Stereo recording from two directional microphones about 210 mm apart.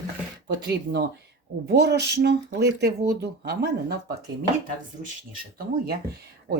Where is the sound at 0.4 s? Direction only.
50° right (ahead or behind).